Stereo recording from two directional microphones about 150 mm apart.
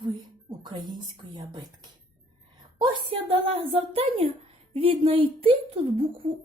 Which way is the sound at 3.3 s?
40° right (ahead or behind).